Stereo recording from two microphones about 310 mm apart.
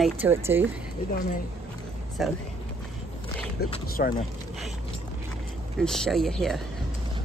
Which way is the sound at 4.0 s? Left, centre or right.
Left.